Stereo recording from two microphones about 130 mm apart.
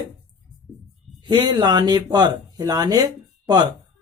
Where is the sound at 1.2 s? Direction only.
35° right (ahead or behind).